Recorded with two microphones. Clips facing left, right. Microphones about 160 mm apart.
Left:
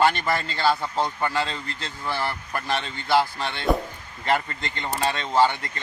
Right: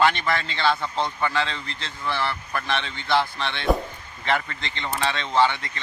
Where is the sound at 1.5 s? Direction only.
45° left (ahead or behind).